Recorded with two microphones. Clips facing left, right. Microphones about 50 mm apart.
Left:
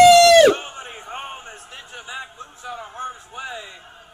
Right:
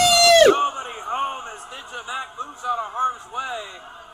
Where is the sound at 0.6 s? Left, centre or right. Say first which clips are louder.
Right 10 dB; right.